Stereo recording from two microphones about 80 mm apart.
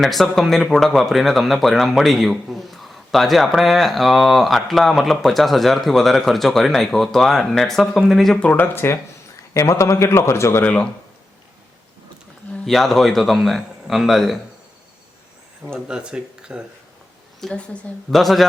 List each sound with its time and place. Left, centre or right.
0.0 s speech: centre
8.4 s a man's voice: left
10.6 s speech: centre
12.6 s speech: centre
15.9 s speech: centre
17.4 s speech: centre